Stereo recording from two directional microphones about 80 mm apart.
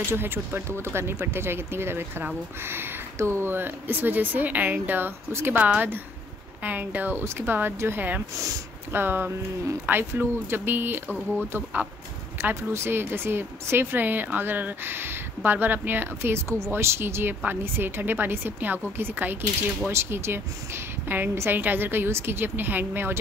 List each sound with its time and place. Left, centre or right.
0.1 s speech: right
12.7 s speech: right